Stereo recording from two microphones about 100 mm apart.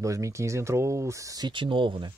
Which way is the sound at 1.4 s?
55° right (ahead or behind).